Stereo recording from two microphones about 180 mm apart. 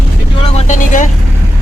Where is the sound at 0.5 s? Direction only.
45° left (ahead or behind).